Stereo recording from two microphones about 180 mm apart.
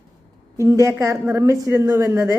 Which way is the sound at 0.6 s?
15° right (ahead or behind).